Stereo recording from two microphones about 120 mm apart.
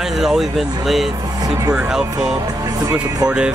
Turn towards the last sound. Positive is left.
turn(degrees=-10)  # may be behind; listen again after turning